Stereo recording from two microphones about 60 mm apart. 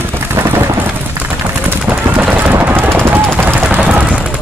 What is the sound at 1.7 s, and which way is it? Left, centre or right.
Machine gun, right.